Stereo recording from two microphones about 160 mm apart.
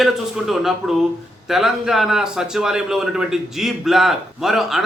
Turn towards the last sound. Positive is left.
turn(degrees=0)  # may be behind; listen again after turning